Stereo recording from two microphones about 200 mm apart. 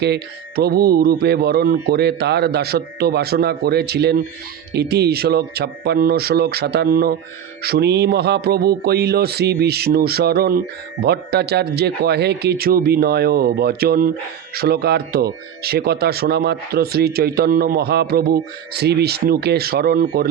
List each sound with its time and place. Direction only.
0.0 s speech: 55° right (ahead or behind)